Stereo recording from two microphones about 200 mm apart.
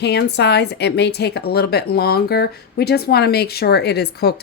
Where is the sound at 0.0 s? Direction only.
55° left (ahead or behind).